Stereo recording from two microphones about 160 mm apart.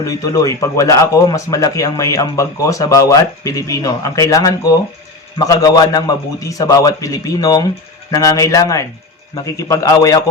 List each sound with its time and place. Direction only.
0.0 s a man's voice: 20° left (ahead or behind)